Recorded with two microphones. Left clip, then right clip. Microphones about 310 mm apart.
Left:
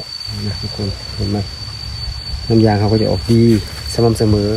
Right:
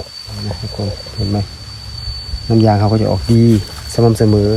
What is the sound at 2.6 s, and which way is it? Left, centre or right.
Speech, right.